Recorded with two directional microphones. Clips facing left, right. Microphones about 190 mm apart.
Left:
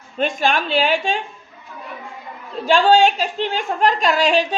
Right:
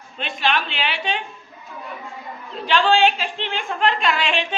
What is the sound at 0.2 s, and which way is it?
A woman's voice, 45° left (ahead or behind).